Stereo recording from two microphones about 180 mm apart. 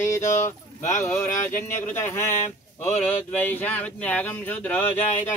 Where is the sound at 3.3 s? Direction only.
10° left (ahead or behind).